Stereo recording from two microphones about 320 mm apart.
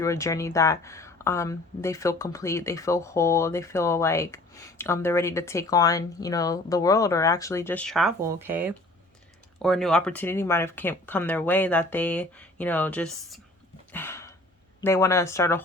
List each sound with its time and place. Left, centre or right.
0.0 s speech: centre
13.9 s a sound: centre
14.8 s speech: centre